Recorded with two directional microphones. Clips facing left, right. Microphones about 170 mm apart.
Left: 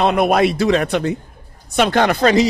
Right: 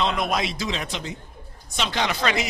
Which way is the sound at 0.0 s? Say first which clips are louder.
Left 10 dB; 60° left (ahead or behind).